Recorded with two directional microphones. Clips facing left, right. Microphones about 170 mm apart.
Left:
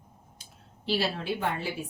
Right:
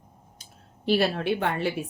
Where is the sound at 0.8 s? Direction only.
55° right (ahead or behind).